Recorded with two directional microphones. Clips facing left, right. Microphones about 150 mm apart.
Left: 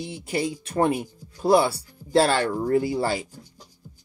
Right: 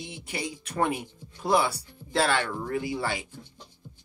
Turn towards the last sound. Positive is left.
turn(degrees=35)  # may be behind; listen again after turning